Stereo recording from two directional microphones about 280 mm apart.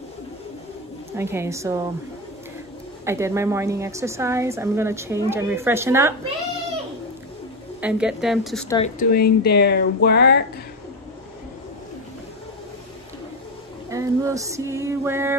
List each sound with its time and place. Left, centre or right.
1.1 s a woman's voice: centre
3.1 s a woman's voice: centre
7.8 s a woman's voice: centre
8.6 s speech: centre
9.0 s speech: left
13.8 s a woman's voice: centre